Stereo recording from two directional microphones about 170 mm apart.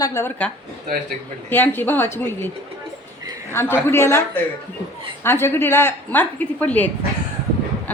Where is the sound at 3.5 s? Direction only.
15° left (ahead or behind).